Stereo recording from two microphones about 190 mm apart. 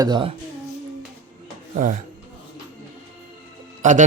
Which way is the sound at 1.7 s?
45° right (ahead or behind).